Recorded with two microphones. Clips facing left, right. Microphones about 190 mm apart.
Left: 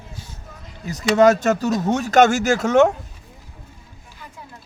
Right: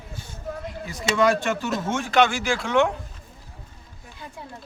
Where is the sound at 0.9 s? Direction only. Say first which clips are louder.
Left 7 dB; 45° left (ahead or behind).